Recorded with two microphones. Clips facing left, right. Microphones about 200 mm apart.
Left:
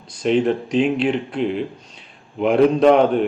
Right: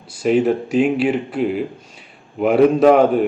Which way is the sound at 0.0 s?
5° right (ahead or behind).